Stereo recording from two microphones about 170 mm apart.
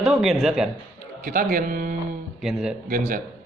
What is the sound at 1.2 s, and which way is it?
Speech, 65° right (ahead or behind).